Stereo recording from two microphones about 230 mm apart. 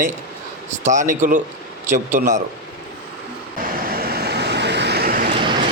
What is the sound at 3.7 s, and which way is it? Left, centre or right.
Vehicle, right.